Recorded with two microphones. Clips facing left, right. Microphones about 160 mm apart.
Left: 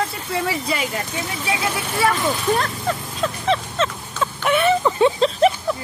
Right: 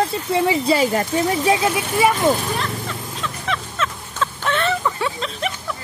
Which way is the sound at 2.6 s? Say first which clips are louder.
Left 3 dB; 45° left (ahead or behind).